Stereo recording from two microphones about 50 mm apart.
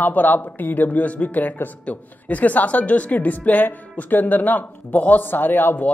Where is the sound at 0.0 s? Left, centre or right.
Left.